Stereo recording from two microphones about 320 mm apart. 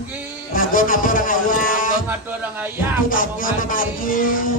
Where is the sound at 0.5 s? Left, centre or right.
Left.